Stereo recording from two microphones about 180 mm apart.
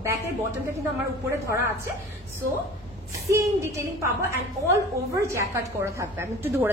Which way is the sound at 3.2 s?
15° right (ahead or behind).